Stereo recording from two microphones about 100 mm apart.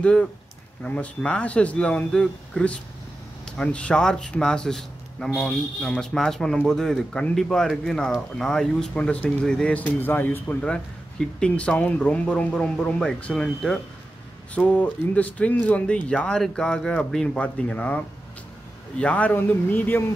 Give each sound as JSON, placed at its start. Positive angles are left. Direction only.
{"t": 0.0, "sound": "a man's voice", "side_deg": 10}